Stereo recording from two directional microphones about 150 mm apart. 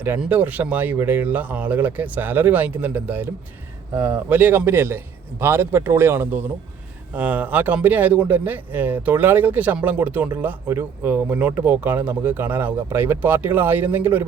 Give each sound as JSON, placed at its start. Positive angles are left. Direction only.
{"t": 0.0, "sound": "a man's voice", "side_deg": -10}